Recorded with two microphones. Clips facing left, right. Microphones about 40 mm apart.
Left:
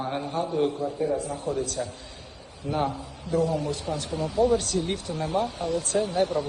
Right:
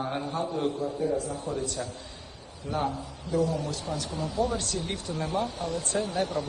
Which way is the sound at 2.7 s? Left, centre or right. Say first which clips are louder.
Left 2 dB; left.